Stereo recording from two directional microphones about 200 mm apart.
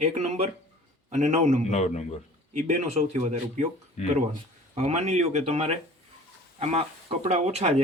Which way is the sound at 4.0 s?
35° left (ahead or behind).